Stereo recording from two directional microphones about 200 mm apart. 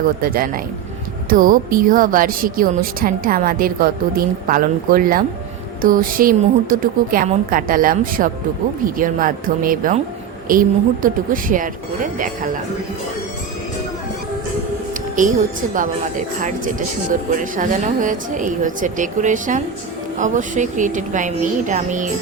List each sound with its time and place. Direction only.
0.2 s a woman's voice: 45° right (ahead or behind)
15.1 s speech: 40° right (ahead or behind)